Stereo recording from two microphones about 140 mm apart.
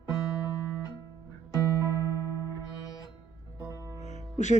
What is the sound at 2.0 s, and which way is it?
Music, 25° left (ahead or behind).